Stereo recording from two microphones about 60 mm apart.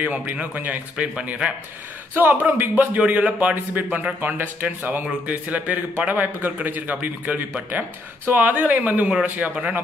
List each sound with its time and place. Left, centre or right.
0.0 s speech: right
9.4 s speech: centre